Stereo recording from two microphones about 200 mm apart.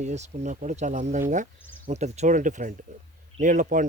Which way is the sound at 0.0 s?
35° right (ahead or behind).